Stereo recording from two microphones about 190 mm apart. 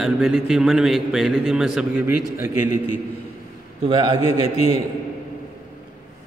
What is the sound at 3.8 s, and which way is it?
Speech, 25° right (ahead or behind).